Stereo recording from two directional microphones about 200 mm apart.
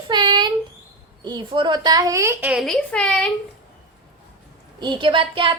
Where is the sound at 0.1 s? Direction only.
20° right (ahead or behind).